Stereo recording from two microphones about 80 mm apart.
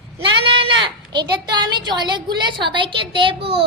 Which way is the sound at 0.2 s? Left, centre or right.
Right.